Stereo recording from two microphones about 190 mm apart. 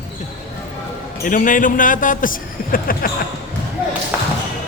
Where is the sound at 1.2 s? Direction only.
45° left (ahead or behind).